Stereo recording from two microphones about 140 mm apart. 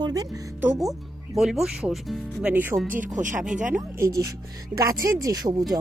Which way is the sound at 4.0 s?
25° right (ahead or behind).